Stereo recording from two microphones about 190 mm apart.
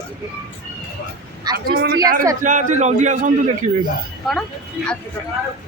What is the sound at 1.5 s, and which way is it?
Speech, 55° right (ahead or behind).